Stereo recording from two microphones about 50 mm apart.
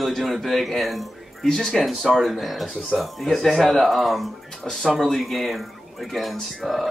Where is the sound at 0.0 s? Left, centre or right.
Centre.